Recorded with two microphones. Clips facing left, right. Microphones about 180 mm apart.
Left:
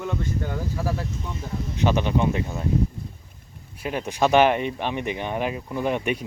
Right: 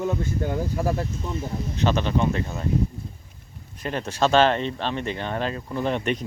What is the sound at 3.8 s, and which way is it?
Speech, 10° left (ahead or behind).